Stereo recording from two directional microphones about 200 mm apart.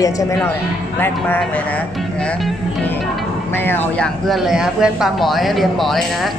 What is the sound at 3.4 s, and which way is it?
Speech, 10° left (ahead or behind).